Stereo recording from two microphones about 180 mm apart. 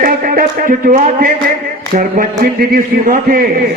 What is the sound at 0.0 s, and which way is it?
A man's voice, 50° right (ahead or behind).